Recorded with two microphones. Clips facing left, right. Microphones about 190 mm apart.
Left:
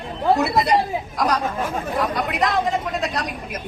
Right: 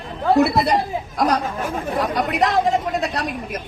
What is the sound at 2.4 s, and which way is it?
Speech, 35° right (ahead or behind).